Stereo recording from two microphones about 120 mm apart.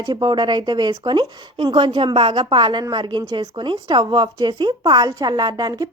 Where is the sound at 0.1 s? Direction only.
40° right (ahead or behind).